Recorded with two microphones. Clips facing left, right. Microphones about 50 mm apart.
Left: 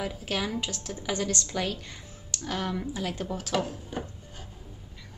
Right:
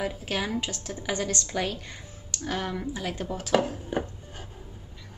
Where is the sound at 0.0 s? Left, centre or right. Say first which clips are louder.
Right 1 dB; centre.